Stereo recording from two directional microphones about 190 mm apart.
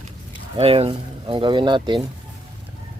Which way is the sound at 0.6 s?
30° right (ahead or behind).